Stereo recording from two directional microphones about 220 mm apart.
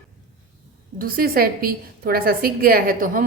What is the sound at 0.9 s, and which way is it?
A woman's voice, 40° right (ahead or behind).